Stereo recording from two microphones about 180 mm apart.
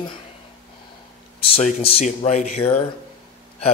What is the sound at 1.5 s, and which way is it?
Speech, 35° left (ahead or behind).